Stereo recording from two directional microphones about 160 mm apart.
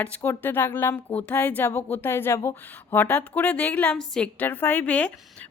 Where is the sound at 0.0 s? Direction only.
10° left (ahead or behind).